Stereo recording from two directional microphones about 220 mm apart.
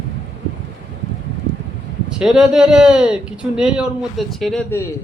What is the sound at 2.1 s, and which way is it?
Speech, 5° right (ahead or behind).